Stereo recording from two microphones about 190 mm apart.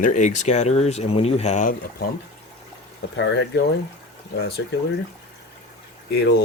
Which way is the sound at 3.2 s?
65° left (ahead or behind).